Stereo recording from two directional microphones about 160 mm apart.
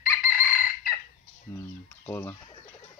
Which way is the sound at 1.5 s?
15° left (ahead or behind).